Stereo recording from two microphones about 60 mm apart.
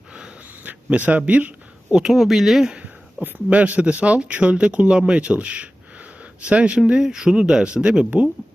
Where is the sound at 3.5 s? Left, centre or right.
Right.